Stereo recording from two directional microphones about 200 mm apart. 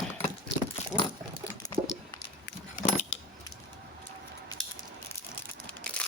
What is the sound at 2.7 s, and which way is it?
Scissors, 35° left (ahead or behind).